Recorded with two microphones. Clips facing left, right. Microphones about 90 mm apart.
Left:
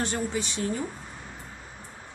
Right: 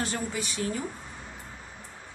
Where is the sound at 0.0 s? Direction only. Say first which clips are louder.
Left 3 dB; 30° left (ahead or behind).